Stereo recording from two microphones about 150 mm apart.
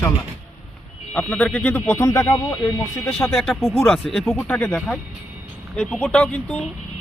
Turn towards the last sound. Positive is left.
turn(degrees=0)  # may be behind; listen again after turning